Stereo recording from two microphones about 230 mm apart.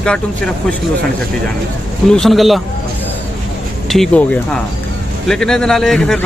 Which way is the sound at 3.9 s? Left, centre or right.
Centre.